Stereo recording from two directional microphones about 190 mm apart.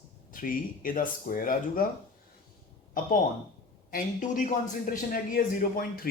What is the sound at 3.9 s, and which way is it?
A man's voice, 45° left (ahead or behind).